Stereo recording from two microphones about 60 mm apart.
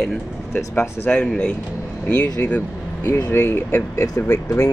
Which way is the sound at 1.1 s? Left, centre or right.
Centre.